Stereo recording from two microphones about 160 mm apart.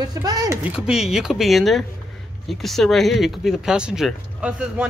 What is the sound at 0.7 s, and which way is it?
Speech, 5° right (ahead or behind).